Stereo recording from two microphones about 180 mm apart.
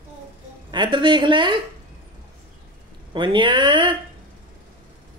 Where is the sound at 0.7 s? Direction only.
25° right (ahead or behind).